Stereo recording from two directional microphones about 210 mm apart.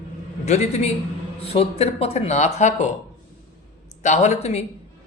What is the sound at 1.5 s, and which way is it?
Speech, 30° left (ahead or behind).